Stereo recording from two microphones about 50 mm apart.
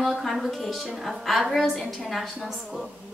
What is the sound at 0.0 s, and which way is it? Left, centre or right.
A woman's voice, centre.